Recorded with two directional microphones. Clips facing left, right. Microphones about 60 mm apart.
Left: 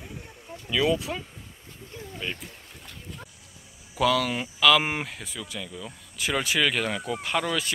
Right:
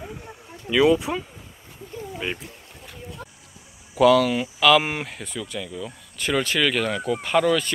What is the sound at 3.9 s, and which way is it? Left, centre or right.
Speech, centre.